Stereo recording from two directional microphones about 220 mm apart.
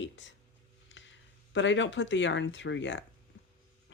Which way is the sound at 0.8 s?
55° left (ahead or behind).